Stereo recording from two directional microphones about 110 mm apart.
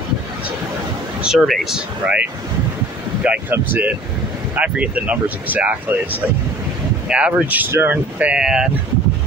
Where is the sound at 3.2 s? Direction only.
15° right (ahead or behind).